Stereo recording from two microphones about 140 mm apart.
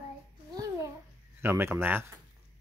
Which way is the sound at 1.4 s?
15° right (ahead or behind).